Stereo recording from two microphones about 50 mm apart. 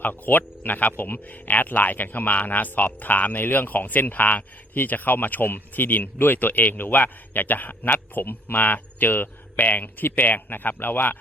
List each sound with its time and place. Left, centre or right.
0.0 s speech: left